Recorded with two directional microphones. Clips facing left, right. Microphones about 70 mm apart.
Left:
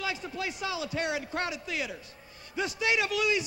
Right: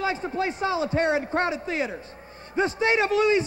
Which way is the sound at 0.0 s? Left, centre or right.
Right.